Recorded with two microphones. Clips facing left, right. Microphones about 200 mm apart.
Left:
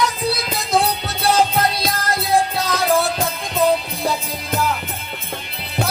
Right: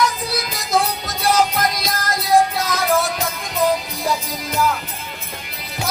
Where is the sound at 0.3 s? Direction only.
30° left (ahead or behind).